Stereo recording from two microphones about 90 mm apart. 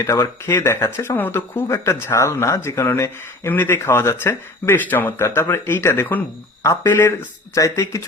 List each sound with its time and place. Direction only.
0.0 s speech: 30° left (ahead or behind)